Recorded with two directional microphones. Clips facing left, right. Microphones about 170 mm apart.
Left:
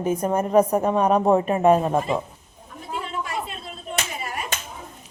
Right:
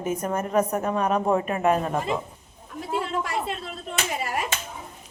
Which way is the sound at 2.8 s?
85° right.